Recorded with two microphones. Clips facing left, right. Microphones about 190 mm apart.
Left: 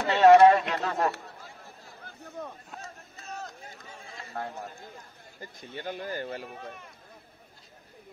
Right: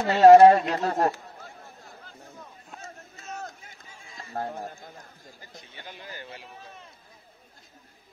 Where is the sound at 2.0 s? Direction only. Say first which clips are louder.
Left 11 dB; 65° left (ahead or behind).